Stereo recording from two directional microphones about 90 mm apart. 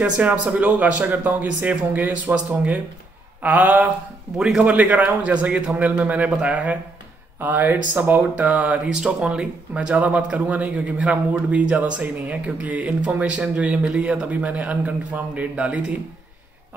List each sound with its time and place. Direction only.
0.0 s speech: 15° right (ahead or behind)
4.4 s a man's voice: 5° right (ahead or behind)
4.6 s speech: 15° right (ahead or behind)